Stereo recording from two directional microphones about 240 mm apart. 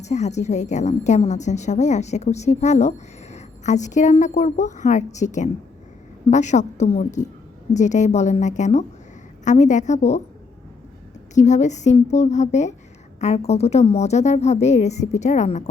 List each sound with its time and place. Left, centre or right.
0.0 s a woman's voice: left
11.3 s a woman's voice: left